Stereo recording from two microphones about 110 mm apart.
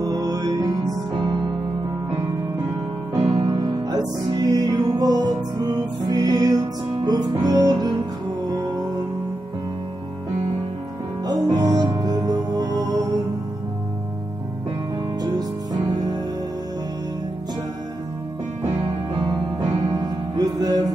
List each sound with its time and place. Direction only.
0.0 s music: 35° right (ahead or behind)
3.2 s music: 40° right (ahead or behind)
11.2 s music: 35° right (ahead or behind)
15.2 s music: 40° right (ahead or behind)
20.0 s music: 35° right (ahead or behind)